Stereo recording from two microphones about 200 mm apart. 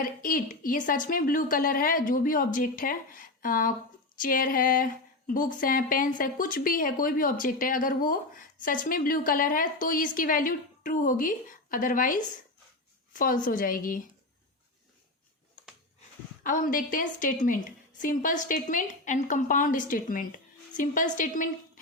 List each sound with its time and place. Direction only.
0.0 s a woman's voice: 45° left (ahead or behind)
16.4 s a woman's voice: 40° left (ahead or behind)